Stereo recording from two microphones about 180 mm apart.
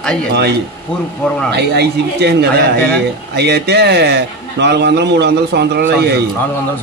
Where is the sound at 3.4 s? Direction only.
65° right (ahead or behind).